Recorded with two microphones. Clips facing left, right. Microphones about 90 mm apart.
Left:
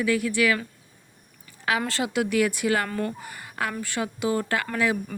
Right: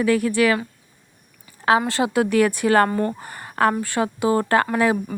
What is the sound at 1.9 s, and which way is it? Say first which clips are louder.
A woman's voice: right 6 dB; 30° right (ahead or behind).